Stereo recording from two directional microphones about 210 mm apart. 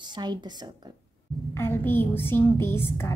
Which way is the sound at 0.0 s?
20° right (ahead or behind).